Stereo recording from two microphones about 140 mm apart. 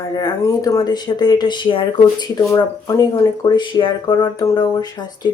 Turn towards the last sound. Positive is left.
turn(degrees=30)  # may be behind; listen again after turning